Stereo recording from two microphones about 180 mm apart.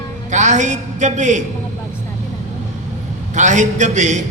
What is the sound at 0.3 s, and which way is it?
A woman's voice, 40° right (ahead or behind).